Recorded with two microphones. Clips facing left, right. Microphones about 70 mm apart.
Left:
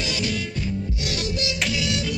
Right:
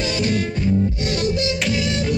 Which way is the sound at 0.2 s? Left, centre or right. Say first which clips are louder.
Right 6 dB; right.